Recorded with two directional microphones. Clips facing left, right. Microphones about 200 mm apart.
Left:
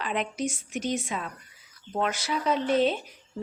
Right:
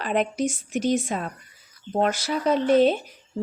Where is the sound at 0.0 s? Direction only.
45° right (ahead or behind).